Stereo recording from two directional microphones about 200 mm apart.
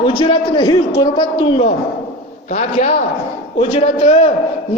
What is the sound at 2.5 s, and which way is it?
A man's voice, 35° left (ahead or behind).